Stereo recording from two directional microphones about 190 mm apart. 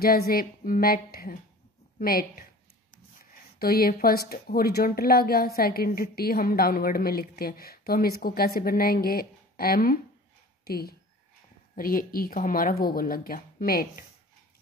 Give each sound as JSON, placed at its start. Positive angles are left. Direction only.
{"t": 0.0, "sound": "speech", "side_deg": 50}
{"t": 3.5, "sound": "speech", "side_deg": 50}